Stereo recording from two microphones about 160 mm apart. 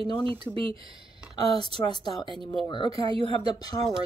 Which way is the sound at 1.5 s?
35° right (ahead or behind).